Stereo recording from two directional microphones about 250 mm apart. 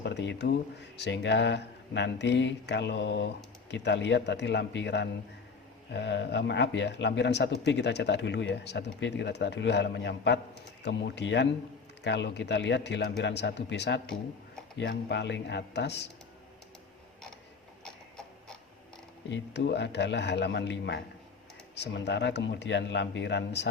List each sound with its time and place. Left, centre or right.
0.0 s speech: left
19.3 s speech: left